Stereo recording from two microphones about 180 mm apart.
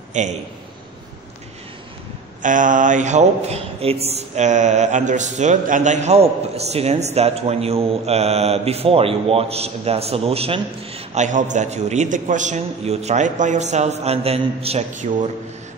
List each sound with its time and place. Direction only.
0.1 s a man's voice: 40° right (ahead or behind)
2.4 s speech: 45° right (ahead or behind)